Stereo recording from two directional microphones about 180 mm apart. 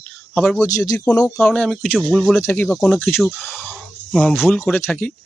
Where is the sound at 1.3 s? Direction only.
5° left (ahead or behind).